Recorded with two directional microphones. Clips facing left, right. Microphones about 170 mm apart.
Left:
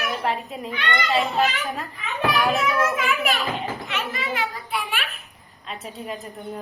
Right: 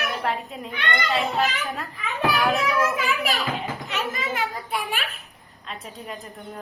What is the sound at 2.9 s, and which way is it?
A child's voice, 35° right (ahead or behind).